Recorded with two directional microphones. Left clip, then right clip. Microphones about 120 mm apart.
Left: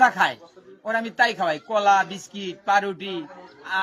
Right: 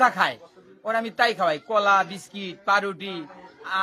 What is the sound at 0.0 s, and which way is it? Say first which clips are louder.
A man's voice: left 2 dB; 30° right (ahead or behind).